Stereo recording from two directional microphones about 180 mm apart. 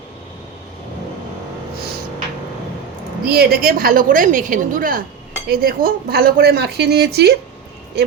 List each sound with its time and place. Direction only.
3.2 s a woman's voice: 60° right (ahead or behind)